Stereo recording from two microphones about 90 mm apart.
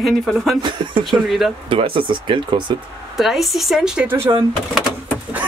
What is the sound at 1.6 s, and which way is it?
Speech, 85° right.